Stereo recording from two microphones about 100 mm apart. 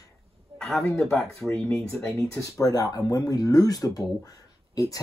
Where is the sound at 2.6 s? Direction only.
40° left (ahead or behind).